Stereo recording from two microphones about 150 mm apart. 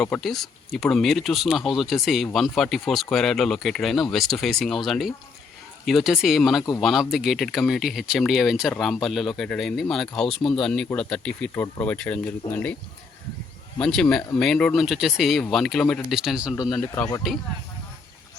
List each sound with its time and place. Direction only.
0.0 s speech: 5° left (ahead or behind)
13.7 s speech: 5° left (ahead or behind)
16.8 s speech: 20° left (ahead or behind)